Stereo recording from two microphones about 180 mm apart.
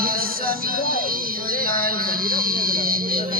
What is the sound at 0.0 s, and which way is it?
Music, 55° right (ahead or behind).